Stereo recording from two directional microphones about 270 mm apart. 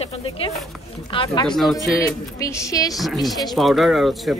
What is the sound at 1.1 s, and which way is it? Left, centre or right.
Speech, centre.